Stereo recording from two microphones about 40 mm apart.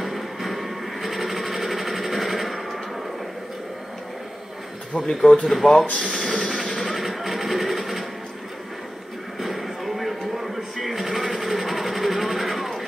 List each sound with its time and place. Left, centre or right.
0.0 s a sound: centre
4.9 s speech: centre
5.4 s speech: centre
5.9 s music: centre
9.4 s music: centre